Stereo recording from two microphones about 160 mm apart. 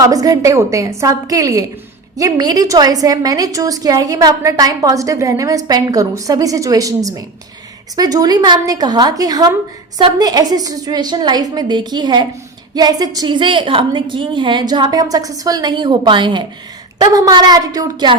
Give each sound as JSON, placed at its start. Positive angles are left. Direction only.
{"t": 0.0, "sound": "a woman's voice", "side_deg": -20}